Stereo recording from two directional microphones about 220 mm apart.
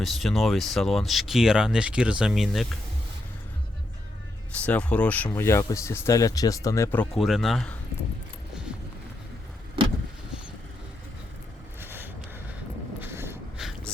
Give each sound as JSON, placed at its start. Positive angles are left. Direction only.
{"t": 0.0, "sound": "speech", "side_deg": 0}
{"t": 4.5, "sound": "speech", "side_deg": 5}
{"t": 9.8, "sound": "vehicle", "side_deg": -25}
{"t": 11.8, "sound": "boat", "side_deg": -10}
{"t": 13.0, "sound": "a sound", "side_deg": -10}